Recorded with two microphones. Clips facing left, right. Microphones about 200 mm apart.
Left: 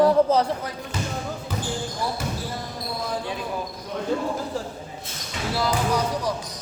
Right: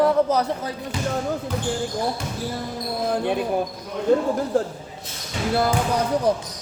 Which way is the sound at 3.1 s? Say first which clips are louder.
Right 9 dB; 60° right (ahead or behind).